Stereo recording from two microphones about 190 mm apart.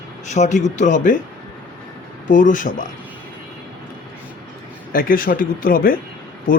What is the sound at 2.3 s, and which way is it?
Speech, 45° left (ahead or behind).